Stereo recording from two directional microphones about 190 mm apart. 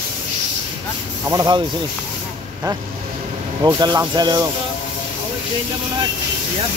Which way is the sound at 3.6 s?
20° right (ahead or behind).